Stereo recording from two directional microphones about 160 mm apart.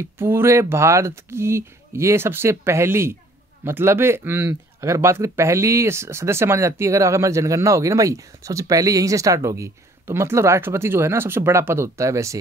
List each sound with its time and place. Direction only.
0.0 s speech: 15° right (ahead or behind)